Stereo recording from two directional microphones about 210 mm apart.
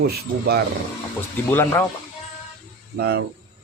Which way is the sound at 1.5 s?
10° left (ahead or behind).